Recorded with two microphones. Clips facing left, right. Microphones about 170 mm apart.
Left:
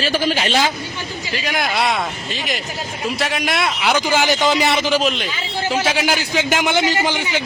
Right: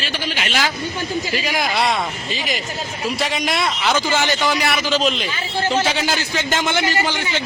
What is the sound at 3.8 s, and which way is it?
A man's voice, 10° left (ahead or behind).